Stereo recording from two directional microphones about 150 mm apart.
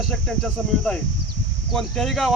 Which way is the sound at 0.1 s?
5° left (ahead or behind).